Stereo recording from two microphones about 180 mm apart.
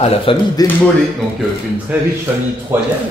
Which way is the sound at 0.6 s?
20° left (ahead or behind).